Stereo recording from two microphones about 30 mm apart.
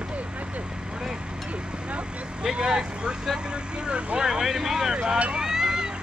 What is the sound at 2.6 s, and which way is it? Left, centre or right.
Speech, right.